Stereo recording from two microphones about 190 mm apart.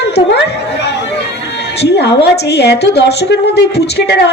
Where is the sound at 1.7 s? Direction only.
60° left (ahead or behind).